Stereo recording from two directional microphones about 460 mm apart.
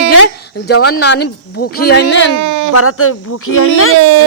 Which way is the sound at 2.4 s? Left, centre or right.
Right.